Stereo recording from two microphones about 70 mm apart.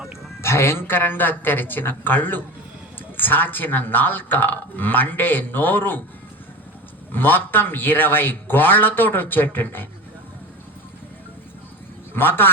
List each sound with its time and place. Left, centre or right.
0.4 s speech: left
7.1 s speech: left
12.1 s a man's voice: left